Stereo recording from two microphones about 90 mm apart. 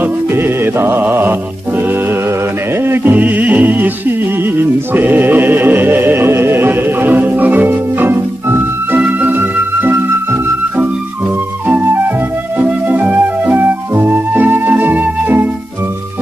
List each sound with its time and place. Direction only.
0.0 s music: 25° right (ahead or behind)
2.8 s music: 25° right (ahead or behind)
11.6 s music: 20° right (ahead or behind)